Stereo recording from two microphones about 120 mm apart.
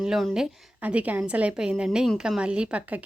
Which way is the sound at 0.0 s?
Centre (ahead or behind).